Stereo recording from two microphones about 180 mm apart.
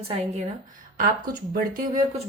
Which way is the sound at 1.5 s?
50° right (ahead or behind).